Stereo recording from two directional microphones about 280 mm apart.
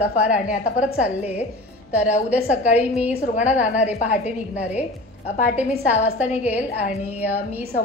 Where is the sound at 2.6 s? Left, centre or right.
Left.